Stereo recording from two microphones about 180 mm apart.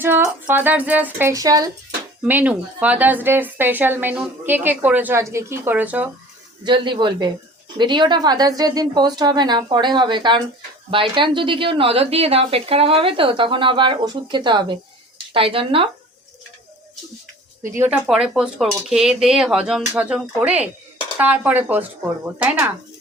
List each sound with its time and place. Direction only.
0.0 s a woman's voice: 10° right (ahead or behind)
2.2 s a woman's voice: 10° right (ahead or behind)
6.7 s a woman's voice: 25° right (ahead or behind)
17.6 s a woman's voice: 10° right (ahead or behind)